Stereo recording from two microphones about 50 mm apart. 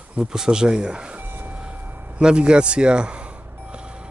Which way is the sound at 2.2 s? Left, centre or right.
Centre.